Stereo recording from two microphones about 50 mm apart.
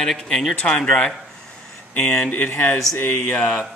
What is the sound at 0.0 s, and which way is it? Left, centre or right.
Speech, centre.